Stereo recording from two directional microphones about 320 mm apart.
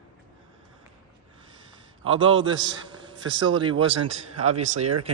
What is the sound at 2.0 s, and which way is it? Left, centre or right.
A man's voice, centre.